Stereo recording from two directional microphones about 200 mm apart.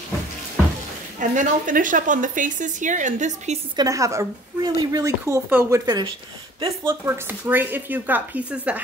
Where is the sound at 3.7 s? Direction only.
15° right (ahead or behind).